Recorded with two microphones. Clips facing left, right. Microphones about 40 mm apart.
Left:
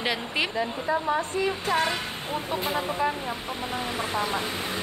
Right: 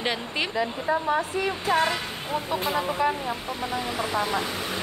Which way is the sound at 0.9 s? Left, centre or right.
Centre.